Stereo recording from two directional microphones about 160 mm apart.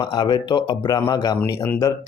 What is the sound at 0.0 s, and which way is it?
A man's voice, 25° left (ahead or behind).